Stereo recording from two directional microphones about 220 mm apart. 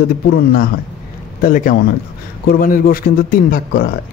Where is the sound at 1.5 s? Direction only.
40° left (ahead or behind).